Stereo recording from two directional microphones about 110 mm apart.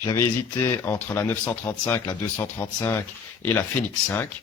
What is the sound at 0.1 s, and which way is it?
Speech, 25° left (ahead or behind).